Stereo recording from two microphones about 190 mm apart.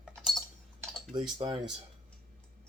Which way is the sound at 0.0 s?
Centre (ahead or behind).